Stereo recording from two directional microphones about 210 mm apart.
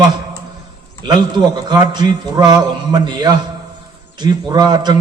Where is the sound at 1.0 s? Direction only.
20° right (ahead or behind).